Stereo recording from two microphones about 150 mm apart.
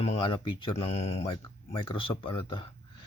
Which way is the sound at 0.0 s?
40° left (ahead or behind).